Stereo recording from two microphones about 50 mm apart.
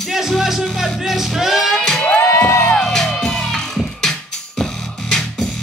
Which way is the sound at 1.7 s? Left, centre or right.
Centre.